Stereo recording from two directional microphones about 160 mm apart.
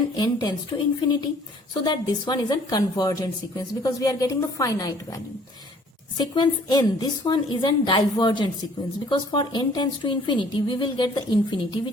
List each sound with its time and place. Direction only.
0.2 s a woman's voice: 25° left (ahead or behind)